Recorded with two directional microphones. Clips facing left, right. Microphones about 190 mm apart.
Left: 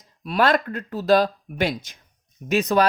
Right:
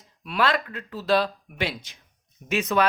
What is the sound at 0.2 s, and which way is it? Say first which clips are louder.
Speech: left 4 dB; 40° left (ahead or behind).